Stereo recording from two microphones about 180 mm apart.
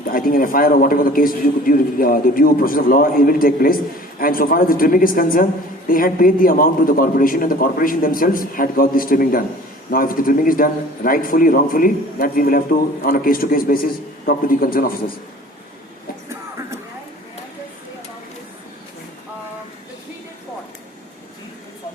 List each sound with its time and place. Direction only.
0.1 s a man's voice: 50° left (ahead or behind)